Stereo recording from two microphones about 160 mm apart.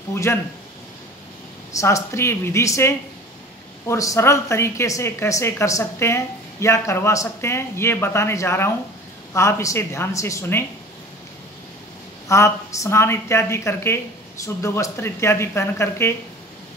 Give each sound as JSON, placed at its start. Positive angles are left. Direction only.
{"t": 0.1, "sound": "a woman's voice", "side_deg": 15}
{"t": 1.7, "sound": "a woman's voice", "side_deg": 20}
{"t": 12.3, "sound": "a woman's voice", "side_deg": 20}